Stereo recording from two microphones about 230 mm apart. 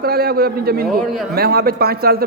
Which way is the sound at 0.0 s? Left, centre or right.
Right.